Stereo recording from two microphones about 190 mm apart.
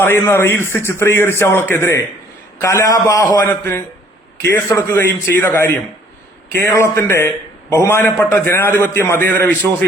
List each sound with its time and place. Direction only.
0.0 s a man's voice: 10° left (ahead or behind)